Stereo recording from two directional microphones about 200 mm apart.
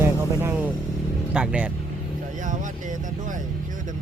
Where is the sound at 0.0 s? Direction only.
10° right (ahead or behind).